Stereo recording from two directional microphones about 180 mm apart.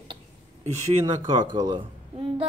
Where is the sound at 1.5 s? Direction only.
25° right (ahead or behind).